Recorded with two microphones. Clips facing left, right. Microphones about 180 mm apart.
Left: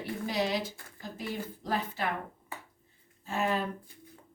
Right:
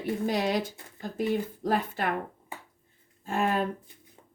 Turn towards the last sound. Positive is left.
turn(degrees=-50)  # may be behind; listen again after turning